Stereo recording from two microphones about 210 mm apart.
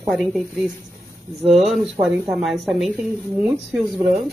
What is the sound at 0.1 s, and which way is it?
A woman's voice, centre (ahead or behind).